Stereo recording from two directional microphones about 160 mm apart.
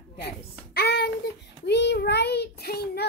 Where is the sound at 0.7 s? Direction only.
90° left.